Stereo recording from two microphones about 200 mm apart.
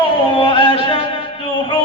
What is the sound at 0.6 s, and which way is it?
Music, 25° left (ahead or behind).